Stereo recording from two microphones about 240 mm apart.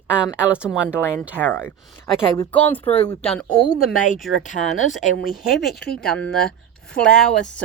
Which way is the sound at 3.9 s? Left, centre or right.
Left.